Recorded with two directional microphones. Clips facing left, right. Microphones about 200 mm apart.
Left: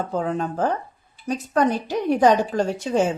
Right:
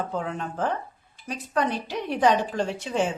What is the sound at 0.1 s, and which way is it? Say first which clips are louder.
A woman's voice: left 6 dB; 40° left (ahead or behind).